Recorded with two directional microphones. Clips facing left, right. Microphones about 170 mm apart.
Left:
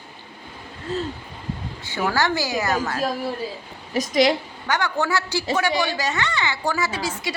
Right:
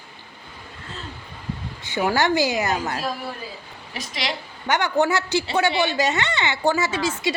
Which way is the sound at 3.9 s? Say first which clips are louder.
Left 12 dB; 45° left (ahead or behind).